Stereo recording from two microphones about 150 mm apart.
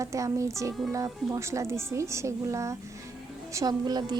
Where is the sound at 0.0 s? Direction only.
20° right (ahead or behind).